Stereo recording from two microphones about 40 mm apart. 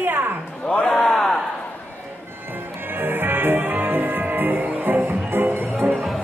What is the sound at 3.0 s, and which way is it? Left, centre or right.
Music, right.